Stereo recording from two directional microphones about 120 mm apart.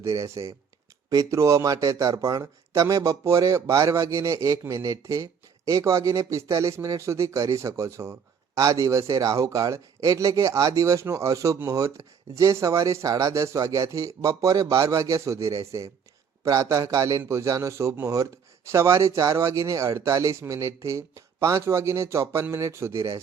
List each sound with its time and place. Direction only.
0.0 s speech: 25° right (ahead or behind)